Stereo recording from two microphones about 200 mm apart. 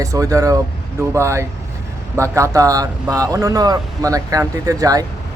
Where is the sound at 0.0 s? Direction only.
15° right (ahead or behind).